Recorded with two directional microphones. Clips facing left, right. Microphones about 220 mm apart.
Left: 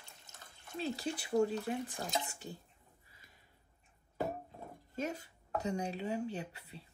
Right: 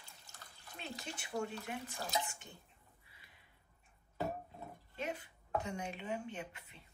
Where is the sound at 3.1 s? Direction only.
40° left (ahead or behind).